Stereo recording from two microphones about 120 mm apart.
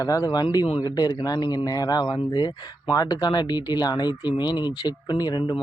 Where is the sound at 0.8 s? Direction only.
35° left (ahead or behind).